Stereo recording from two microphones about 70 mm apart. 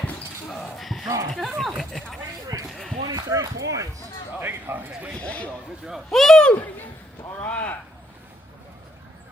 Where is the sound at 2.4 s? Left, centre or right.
Right.